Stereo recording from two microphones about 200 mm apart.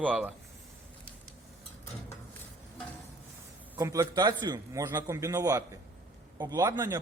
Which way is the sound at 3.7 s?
15° right (ahead or behind).